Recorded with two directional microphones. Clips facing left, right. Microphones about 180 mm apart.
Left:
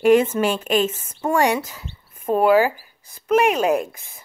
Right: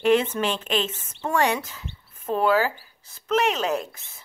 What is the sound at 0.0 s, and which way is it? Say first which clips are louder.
Speech: left 5 dB; 10° left (ahead or behind).